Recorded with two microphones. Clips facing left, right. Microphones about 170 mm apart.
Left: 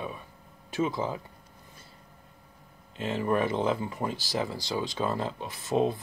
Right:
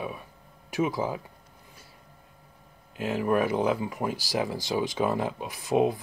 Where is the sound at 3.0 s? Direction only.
10° right (ahead or behind).